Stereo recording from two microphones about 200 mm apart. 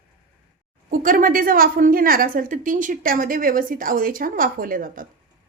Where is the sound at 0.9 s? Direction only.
45° right (ahead or behind).